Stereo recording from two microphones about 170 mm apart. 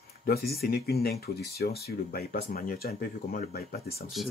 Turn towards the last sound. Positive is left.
turn(degrees=60)  # may be behind; listen again after turning